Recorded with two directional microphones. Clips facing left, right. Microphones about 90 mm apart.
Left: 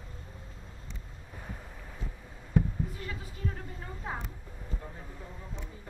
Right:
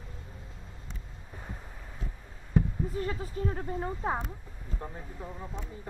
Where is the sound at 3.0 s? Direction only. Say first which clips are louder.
Right 8 dB; 35° right (ahead or behind).